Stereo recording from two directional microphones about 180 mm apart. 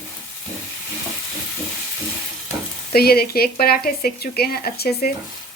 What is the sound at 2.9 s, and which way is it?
Speech, 60° left (ahead or behind).